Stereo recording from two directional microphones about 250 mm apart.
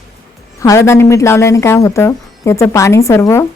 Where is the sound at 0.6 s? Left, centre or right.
Centre.